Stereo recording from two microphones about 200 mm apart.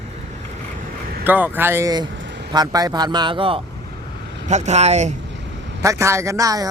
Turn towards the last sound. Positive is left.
turn(degrees=-15)  # may be behind; listen again after turning